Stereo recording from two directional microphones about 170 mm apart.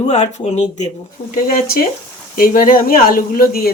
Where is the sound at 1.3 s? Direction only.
55° left (ahead or behind).